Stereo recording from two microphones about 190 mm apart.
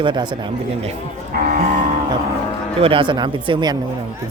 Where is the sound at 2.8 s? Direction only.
25° right (ahead or behind).